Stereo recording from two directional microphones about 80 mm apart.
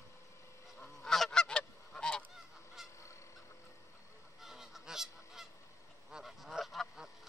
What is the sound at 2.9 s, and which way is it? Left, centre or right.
Goose, left.